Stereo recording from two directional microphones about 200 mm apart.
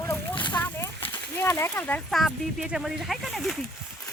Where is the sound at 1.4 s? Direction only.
15° left (ahead or behind).